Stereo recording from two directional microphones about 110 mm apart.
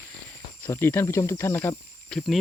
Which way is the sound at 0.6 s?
15° left (ahead or behind).